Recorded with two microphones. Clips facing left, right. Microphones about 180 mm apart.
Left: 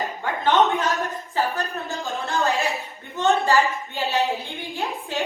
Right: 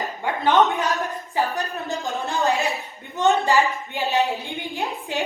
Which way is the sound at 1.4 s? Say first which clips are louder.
Even; 15° right (ahead or behind).